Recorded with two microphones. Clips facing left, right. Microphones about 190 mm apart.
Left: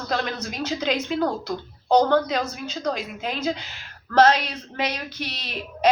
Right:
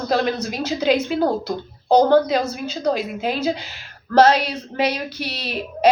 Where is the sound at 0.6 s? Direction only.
10° right (ahead or behind).